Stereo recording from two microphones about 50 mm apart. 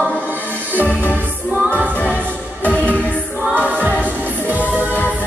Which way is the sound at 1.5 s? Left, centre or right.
Right.